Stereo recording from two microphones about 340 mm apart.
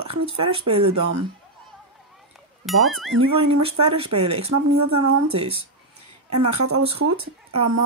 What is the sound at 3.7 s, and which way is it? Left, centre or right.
Speech, centre.